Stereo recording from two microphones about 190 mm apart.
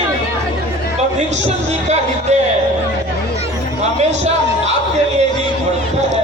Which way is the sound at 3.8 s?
35° right (ahead or behind).